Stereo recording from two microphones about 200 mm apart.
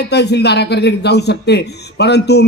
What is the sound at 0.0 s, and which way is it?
A man's voice, 55° left (ahead or behind).